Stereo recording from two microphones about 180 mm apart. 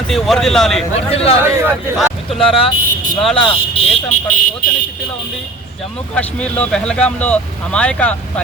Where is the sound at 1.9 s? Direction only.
Centre (ahead or behind).